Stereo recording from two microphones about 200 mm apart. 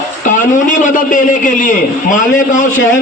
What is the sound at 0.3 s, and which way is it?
A man's voice, 40° left (ahead or behind).